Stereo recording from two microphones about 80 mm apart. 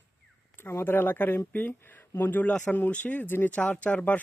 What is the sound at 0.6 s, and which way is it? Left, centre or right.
Speech, left.